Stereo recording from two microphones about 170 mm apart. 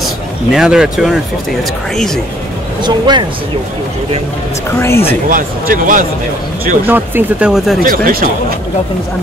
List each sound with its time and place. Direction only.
0.0 s speech: 5° right (ahead or behind)
2.8 s speech: 25° right (ahead or behind)
4.6 s speech: 15° left (ahead or behind)
5.3 s speech: 55° right (ahead or behind)
6.9 s speech: 10° right (ahead or behind)
7.8 s speech: 55° right (ahead or behind)